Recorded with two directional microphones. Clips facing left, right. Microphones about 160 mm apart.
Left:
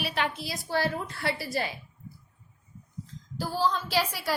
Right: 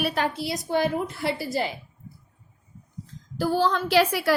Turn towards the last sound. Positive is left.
turn(degrees=-65)  # may be behind; listen again after turning